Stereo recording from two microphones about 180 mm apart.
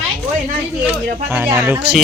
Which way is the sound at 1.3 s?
10° right (ahead or behind).